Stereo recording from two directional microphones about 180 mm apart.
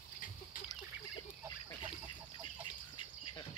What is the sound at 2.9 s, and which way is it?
Bird, 25° left (ahead or behind).